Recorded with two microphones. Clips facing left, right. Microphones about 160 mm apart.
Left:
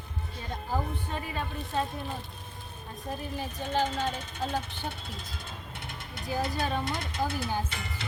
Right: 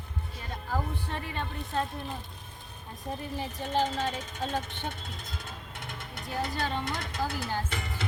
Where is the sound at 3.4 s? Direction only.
Centre (ahead or behind).